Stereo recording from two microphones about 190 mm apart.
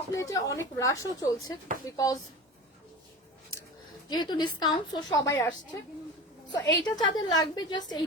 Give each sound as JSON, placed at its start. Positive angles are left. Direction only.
{"t": 0.1, "sound": "a woman's voice", "side_deg": 15}
{"t": 4.1, "sound": "a woman's voice", "side_deg": 25}